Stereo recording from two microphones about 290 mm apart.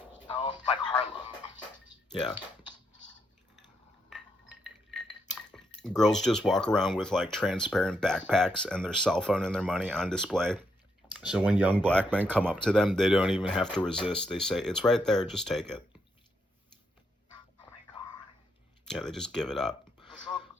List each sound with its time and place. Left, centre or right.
0.4 s music: centre
6.0 s speech: centre
18.9 s speech: centre
20.1 s a sound: centre